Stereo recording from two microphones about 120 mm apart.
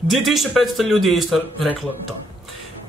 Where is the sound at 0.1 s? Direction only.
Centre (ahead or behind).